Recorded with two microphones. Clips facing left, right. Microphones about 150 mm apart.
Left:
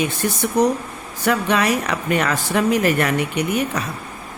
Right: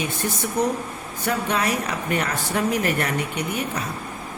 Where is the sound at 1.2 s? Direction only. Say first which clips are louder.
Left 5 dB; 90° left.